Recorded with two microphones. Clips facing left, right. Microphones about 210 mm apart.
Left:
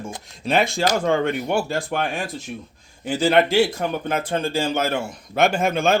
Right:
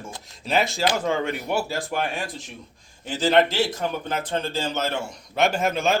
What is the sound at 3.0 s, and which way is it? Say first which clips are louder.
A man's voice: left 2 dB; 10° left (ahead or behind).